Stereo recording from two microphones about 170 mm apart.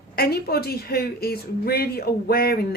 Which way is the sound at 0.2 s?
65° left (ahead or behind).